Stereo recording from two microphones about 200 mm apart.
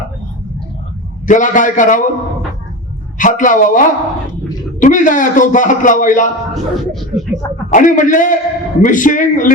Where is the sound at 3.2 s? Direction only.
40° left (ahead or behind).